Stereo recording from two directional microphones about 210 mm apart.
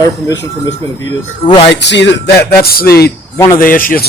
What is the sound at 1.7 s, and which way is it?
Music, 55° left (ahead or behind).